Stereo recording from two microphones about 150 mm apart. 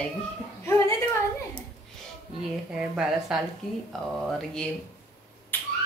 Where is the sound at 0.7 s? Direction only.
20° left (ahead or behind).